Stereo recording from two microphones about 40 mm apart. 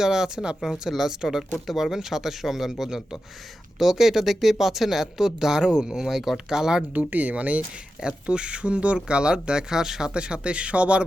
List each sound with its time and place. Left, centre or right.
0.0 s speech: centre
7.1 s speech: right
8.0 s speech: right